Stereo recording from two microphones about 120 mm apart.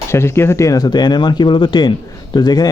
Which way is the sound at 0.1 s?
20° left (ahead or behind).